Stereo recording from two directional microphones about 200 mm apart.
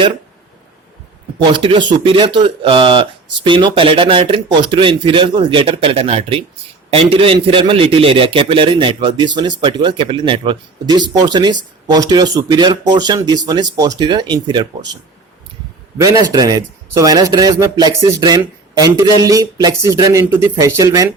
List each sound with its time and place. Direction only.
1.5 s a man's voice: 25° right (ahead or behind)
16.0 s speech: 20° right (ahead or behind)